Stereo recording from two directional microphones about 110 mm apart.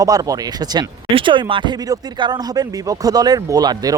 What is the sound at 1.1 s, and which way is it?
Speech, 50° right (ahead or behind).